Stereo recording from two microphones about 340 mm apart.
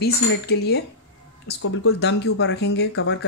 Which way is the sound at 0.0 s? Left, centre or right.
Left.